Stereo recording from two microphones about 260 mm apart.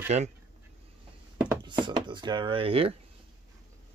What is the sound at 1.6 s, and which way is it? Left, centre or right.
Speech, centre.